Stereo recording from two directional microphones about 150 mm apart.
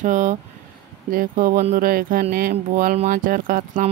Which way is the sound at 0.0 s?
55° right (ahead or behind).